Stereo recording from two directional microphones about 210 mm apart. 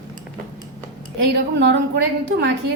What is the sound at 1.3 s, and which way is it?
Speech, 55° right (ahead or behind).